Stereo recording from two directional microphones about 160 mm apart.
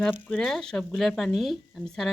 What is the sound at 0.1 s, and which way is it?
Speech, 5° left (ahead or behind).